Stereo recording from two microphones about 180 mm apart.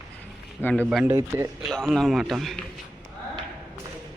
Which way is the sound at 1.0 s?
15° right (ahead or behind).